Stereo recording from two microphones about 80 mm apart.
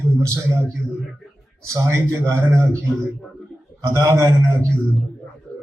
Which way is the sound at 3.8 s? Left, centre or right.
Right.